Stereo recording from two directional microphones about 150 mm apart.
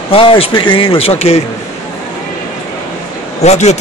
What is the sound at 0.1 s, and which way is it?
A man's voice, 35° left (ahead or behind).